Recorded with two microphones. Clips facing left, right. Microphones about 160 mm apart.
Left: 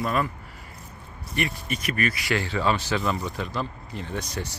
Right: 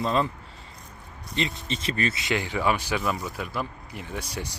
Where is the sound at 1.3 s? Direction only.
20° right (ahead or behind).